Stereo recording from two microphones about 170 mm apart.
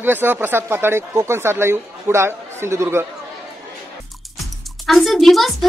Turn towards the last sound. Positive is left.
turn(degrees=0)  # may be behind; listen again after turning